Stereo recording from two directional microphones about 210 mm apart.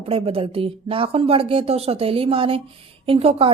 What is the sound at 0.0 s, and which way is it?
Speech, 25° right (ahead or behind).